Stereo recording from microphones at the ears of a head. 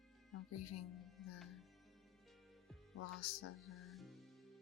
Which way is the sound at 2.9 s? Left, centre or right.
Left.